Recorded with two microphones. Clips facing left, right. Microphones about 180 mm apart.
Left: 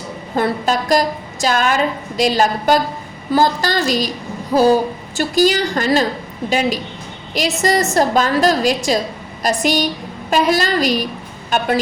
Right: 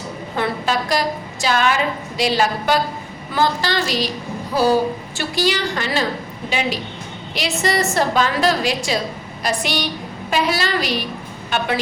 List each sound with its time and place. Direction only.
0.3 s a woman's voice: 45° left (ahead or behind)
5.1 s a woman's voice: 45° left (ahead or behind)